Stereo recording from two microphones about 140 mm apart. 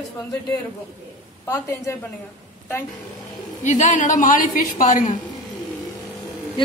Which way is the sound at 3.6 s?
60° left (ahead or behind).